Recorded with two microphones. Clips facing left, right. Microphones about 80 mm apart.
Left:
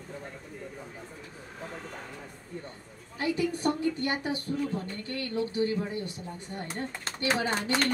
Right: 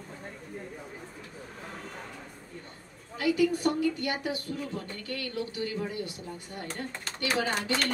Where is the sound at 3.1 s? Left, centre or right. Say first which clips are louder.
Right 3 dB; left.